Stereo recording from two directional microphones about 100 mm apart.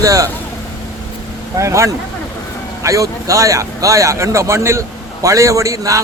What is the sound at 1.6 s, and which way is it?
A man's voice, 30° right (ahead or behind).